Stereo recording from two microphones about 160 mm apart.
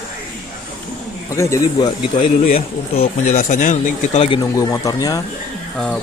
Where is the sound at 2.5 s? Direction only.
45° left (ahead or behind).